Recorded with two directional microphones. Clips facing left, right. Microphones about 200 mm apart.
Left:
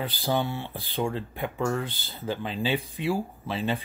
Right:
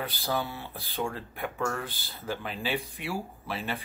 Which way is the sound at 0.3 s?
25° left (ahead or behind).